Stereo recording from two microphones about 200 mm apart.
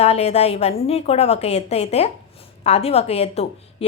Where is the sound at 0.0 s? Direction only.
30° left (ahead or behind).